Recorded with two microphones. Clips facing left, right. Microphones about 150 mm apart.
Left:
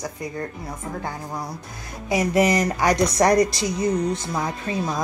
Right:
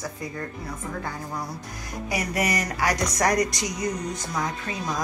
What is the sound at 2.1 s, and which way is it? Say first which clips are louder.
Speech: left 8 dB; 25° left (ahead or behind).